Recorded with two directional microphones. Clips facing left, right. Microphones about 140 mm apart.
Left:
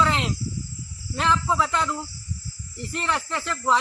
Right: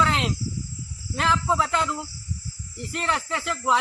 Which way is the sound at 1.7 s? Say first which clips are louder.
Even; 5° right (ahead or behind).